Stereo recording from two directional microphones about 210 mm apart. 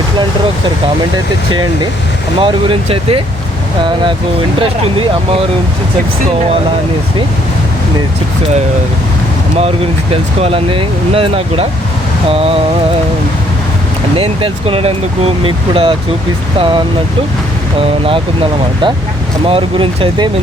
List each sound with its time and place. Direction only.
2.4 s speech: 25° right (ahead or behind)
4.6 s speech: 25° right (ahead or behind)
9.6 s speech: 30° right (ahead or behind)
14.2 s speech: 25° right (ahead or behind)
17.7 s speech: 25° right (ahead or behind)
19.5 s speech: 25° right (ahead or behind)